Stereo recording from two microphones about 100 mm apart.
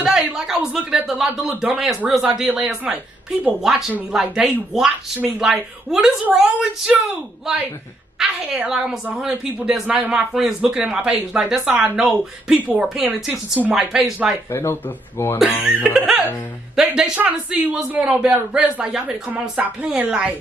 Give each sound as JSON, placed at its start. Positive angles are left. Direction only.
{"t": 0.0, "sound": "a man's voice", "side_deg": -5}
{"t": 8.2, "sound": "a man's voice", "side_deg": -5}
{"t": 13.0, "sound": "a man's voice", "side_deg": -15}
{"t": 14.5, "sound": "speech", "side_deg": 25}
{"t": 15.6, "sound": "a man's voice", "side_deg": -5}